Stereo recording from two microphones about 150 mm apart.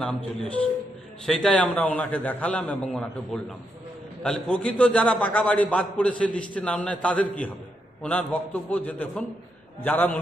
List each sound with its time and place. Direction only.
0.0 s a man's voice: 5° left (ahead or behind)